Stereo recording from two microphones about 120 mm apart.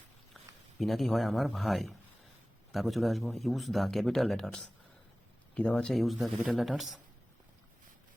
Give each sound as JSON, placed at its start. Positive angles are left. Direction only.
{"t": 0.8, "sound": "a man's voice", "side_deg": 0}